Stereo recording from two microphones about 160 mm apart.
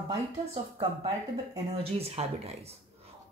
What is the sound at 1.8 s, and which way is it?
Speech, 40° right (ahead or behind).